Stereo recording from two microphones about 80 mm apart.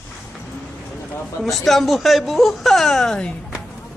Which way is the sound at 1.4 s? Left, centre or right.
Centre.